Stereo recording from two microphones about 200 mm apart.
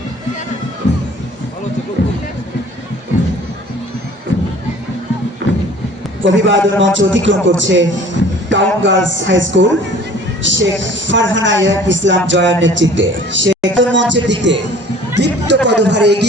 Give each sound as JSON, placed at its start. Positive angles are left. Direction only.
{"t": 5.4, "sound": "music", "side_deg": -65}
{"t": 6.2, "sound": "speech", "side_deg": -65}